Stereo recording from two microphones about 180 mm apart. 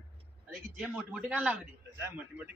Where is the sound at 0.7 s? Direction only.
Centre (ahead or behind).